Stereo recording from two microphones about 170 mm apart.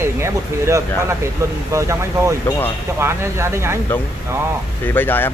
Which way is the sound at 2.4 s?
10° left (ahead or behind).